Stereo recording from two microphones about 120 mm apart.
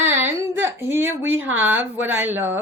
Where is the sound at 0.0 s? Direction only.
15° right (ahead or behind).